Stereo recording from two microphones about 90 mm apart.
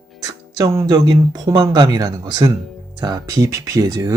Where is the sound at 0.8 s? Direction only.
55° right (ahead or behind).